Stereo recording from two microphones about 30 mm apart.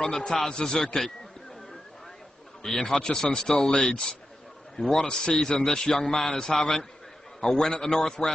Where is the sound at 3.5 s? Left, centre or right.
Left.